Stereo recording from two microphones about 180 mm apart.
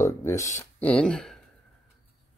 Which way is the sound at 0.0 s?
15° left (ahead or behind).